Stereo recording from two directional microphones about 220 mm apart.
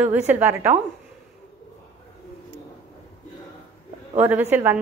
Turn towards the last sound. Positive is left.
turn(degrees=-10)  # may be behind; listen again after turning